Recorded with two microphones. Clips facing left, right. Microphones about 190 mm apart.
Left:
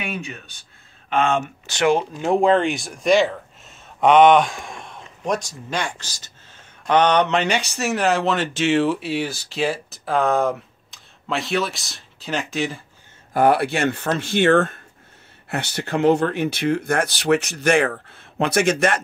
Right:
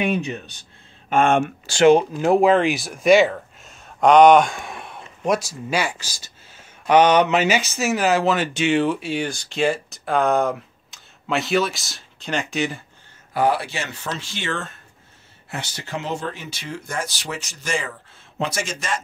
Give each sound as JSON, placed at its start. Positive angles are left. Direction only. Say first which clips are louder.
{"t": 0.0, "sound": "speech", "louder": "right 7 dB", "side_deg": -35}
{"t": 1.1, "sound": "speech", "louder": "right 3 dB", "side_deg": -50}
{"t": 1.7, "sound": "speech", "louder": "right 5 dB", "side_deg": -30}
{"t": 2.2, "sound": "speech", "louder": "even", "side_deg": -5}
{"t": 13.3, "sound": "speech", "louder": "left 4 dB", "side_deg": 55}